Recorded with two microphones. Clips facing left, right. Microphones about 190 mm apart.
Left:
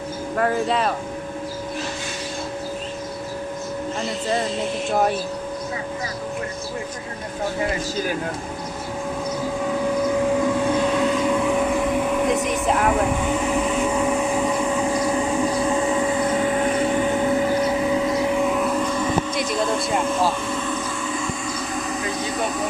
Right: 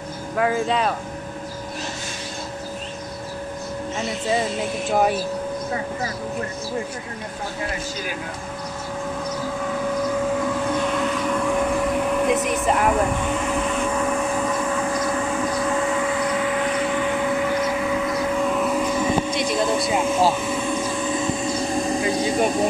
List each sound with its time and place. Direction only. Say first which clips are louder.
0.4 s speech: even; centre (ahead or behind)
4.9 s speech: right 1 dB; 5° right (ahead or behind)
10.7 s vehicle: left 3 dB; 10° left (ahead or behind)
18.5 s vehicle: even; centre (ahead or behind)
19.3 s a sound: right 1 dB; 5° right (ahead or behind); by 22.0 s 30° right (ahead or behind)
22.3 s speech: right 5 dB; 30° right (ahead or behind)